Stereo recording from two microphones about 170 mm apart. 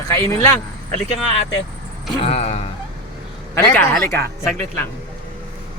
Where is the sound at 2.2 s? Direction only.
35° left (ahead or behind).